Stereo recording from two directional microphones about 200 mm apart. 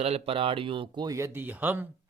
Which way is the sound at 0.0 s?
30° right (ahead or behind).